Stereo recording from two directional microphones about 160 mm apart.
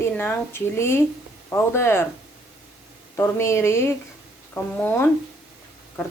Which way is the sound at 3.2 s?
15° left (ahead or behind).